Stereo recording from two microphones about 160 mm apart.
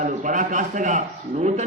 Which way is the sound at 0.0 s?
55° right (ahead or behind).